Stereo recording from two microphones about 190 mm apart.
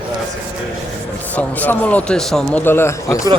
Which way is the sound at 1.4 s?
10° left (ahead or behind).